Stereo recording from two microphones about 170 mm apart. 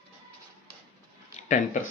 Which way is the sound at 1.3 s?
45° left (ahead or behind).